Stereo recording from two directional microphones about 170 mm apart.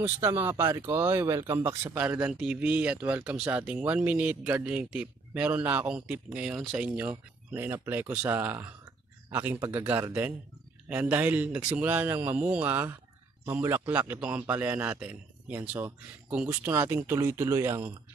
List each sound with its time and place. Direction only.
0.0 s speech: 15° right (ahead or behind)